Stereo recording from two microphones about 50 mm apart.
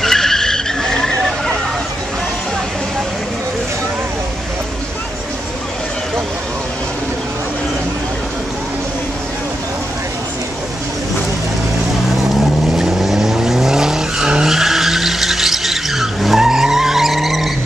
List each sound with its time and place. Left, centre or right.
0.0 s vehicle: centre
12.6 s vehicle: centre